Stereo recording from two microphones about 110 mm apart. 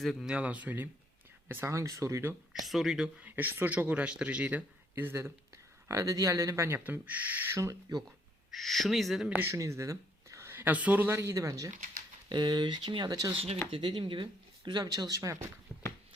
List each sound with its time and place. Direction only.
0.0 s speech: centre (ahead or behind)
0.3 s speech: 10° right (ahead or behind)
2.6 s speech: centre (ahead or behind)
3.2 s speech: 15° right (ahead or behind)
5.9 s speech: 30° right (ahead or behind)
8.4 s speech: centre (ahead or behind)
9.3 s speech: 25° right (ahead or behind)
12.3 s speech: 40° right (ahead or behind)
13.3 s speech: 65° right (ahead or behind)
13.7 s speech: 50° right (ahead or behind); by 15.4 s 30° right (ahead or behind)
15.7 s a sound: 5° left (ahead or behind)